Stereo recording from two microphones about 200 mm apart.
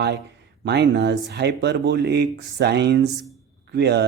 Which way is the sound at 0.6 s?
55° right (ahead or behind).